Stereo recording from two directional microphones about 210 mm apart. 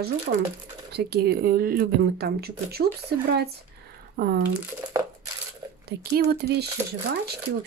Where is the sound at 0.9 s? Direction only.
50° right (ahead or behind).